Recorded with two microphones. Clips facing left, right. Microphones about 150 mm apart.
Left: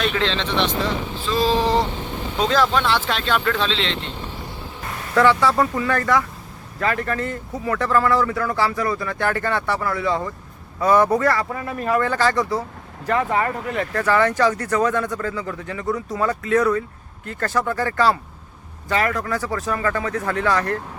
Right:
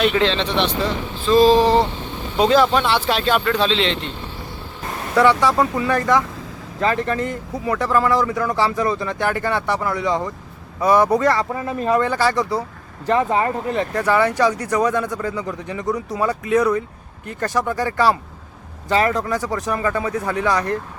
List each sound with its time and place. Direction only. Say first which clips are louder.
0.0 s speech: right 5 dB; 10° right (ahead or behind)
2.4 s speech: right 4 dB; 10° right (ahead or behind)
5.1 s speech: right 1 dB; 15° right (ahead or behind)
13.1 s speech: right 3 dB; 25° right (ahead or behind)